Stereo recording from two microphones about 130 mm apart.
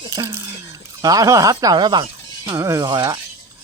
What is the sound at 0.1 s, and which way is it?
Speech, 20° right (ahead or behind).